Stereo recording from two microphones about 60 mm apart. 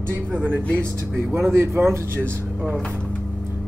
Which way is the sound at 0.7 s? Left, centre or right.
Right.